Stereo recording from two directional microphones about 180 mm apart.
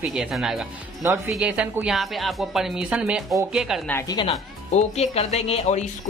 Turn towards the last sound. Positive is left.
turn(degrees=35)  # may be behind; listen again after turning